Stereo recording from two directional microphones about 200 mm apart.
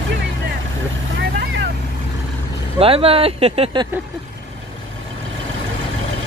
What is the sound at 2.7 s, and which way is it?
Speech, 30° right (ahead or behind).